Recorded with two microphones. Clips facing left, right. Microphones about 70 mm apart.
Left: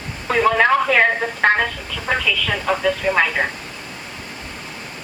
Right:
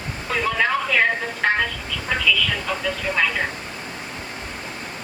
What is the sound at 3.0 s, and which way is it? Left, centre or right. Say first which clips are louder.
Speech: left 6 dB; left.